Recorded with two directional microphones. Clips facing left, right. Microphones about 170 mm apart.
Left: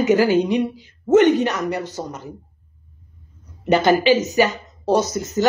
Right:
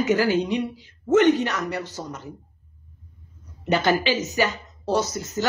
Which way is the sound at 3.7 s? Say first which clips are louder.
Left 6 dB; 15° left (ahead or behind).